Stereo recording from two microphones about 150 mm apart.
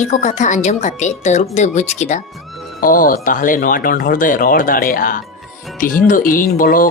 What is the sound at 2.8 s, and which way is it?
Speech, 65° left (ahead or behind).